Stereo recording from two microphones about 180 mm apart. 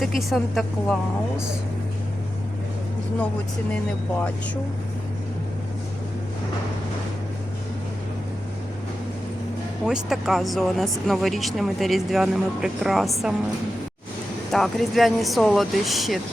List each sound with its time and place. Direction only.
0.0 s speech: centre (ahead or behind)
9.8 s speech: 5° right (ahead or behind)
14.5 s speech: centre (ahead or behind)